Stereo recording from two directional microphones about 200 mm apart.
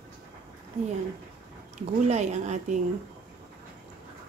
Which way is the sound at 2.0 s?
35° right (ahead or behind).